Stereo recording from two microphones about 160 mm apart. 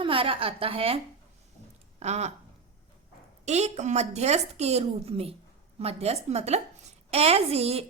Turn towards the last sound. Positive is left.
turn(degrees=-40)  # may be behind; listen again after turning